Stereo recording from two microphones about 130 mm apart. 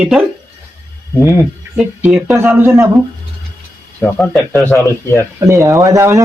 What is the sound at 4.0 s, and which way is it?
Speech, 5° left (ahead or behind).